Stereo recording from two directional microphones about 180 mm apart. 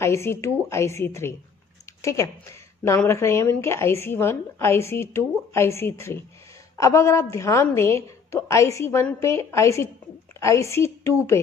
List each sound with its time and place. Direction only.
0.0 s a woman's voice: 15° left (ahead or behind)